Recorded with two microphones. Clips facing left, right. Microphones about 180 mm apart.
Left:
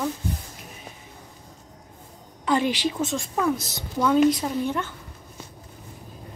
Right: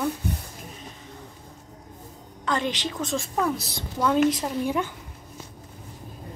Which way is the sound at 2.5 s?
10° left (ahead or behind).